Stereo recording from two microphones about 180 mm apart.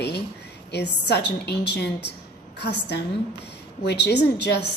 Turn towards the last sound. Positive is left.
turn(degrees=70)  # may be behind; listen again after turning